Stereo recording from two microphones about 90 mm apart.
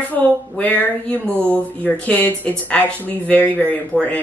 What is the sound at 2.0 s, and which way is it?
Speech, 15° left (ahead or behind).